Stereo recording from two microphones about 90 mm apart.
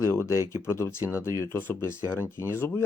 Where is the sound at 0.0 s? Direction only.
30° left (ahead or behind).